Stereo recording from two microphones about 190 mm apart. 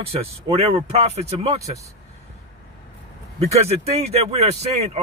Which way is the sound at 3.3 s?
35° right (ahead or behind).